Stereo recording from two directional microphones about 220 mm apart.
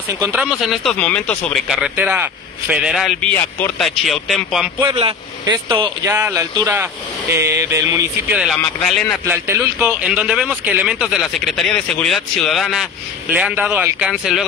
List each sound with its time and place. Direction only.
0.2 s speech: 5° right (ahead or behind)
4.9 s speech: 20° right (ahead or behind); by 14.4 s 5° right (ahead or behind)